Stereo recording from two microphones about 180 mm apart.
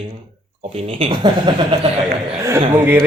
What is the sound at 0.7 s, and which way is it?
Speech, 30° right (ahead or behind).